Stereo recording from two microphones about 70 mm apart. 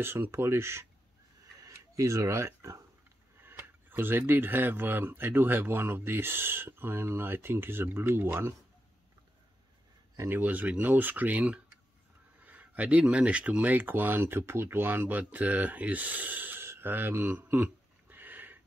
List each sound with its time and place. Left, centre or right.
0.0 s speech: right
2.0 s speech: right
3.5 s tick-tock: right
4.3 s speech: right
10.1 s speech: right
10.4 s speech: right
16.6 s a sound: right